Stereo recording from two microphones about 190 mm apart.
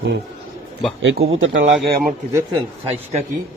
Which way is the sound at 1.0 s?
80° right.